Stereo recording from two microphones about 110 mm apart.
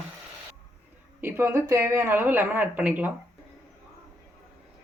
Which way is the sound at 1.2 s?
25° right (ahead or behind).